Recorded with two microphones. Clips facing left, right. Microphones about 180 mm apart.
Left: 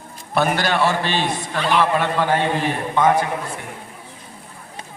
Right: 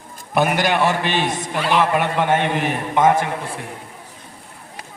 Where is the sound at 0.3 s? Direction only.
15° right (ahead or behind).